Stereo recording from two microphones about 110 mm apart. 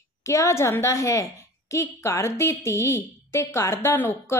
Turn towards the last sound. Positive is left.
turn(degrees=15)  # may be behind; listen again after turning